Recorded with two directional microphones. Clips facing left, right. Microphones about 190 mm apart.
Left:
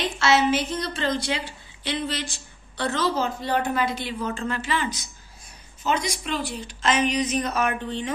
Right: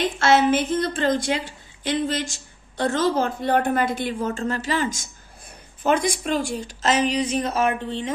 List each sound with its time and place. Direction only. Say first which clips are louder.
0.0 s a woman's voice: right 3 dB; 50° right (ahead or behind); by 8.1 s 25° right (ahead or behind)